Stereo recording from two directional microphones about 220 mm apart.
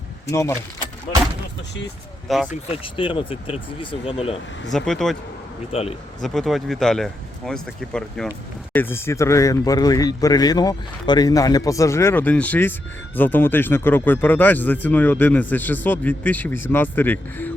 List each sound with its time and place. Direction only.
0.3 s speech: 15° left (ahead or behind)
2.2 s speech: centre (ahead or behind)
2.5 s speech: 25° left (ahead or behind)
4.7 s speech: centre (ahead or behind)
6.2 s speech: centre (ahead or behind)